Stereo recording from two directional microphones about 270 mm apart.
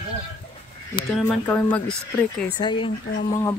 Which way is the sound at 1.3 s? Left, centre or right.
Centre.